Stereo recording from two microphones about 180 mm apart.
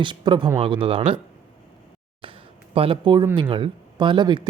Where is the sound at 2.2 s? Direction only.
30° right (ahead or behind).